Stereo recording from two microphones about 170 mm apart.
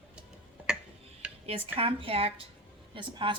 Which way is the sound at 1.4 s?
35° right (ahead or behind).